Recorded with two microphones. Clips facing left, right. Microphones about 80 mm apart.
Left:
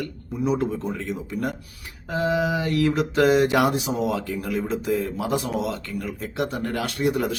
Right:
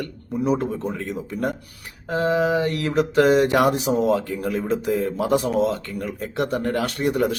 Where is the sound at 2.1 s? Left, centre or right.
Right.